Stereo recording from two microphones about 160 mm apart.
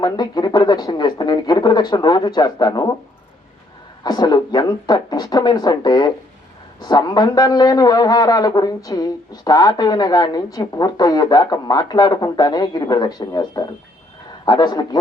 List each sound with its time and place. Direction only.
0.0 s a man's voice: 25° left (ahead or behind)
4.0 s a man's voice: 25° left (ahead or behind)